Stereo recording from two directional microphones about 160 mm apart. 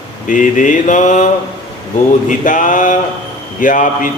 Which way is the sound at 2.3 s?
55° left (ahead or behind).